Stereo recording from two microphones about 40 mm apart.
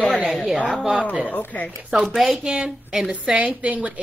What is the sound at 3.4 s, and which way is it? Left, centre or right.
Speech, right.